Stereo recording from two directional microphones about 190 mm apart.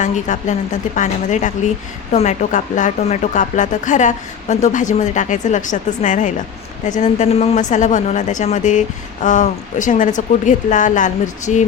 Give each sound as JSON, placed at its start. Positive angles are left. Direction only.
{"t": 0.0, "sound": "speech", "side_deg": 40}